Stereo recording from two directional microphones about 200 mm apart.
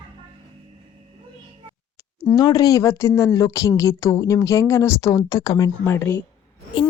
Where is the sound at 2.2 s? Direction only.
20° left (ahead or behind).